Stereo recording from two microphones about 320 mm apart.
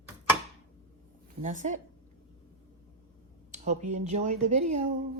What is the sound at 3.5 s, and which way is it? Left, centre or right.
Speech, right.